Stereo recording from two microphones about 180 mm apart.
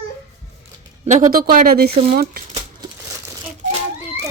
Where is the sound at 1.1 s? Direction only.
50° right (ahead or behind).